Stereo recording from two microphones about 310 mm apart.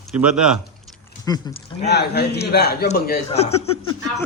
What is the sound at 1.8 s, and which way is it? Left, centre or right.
A man's voice, left.